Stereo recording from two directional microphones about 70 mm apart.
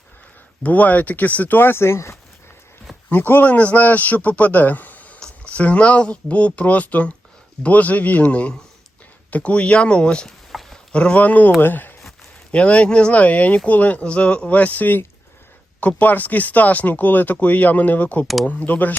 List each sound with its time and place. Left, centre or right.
0.6 s a man's voice: left
3.1 s a man's voice: left
10.2 s a sound: centre
10.9 s a man's voice: centre
12.5 s a man's voice: centre